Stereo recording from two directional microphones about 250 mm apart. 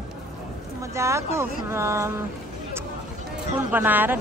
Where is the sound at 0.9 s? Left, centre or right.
Centre.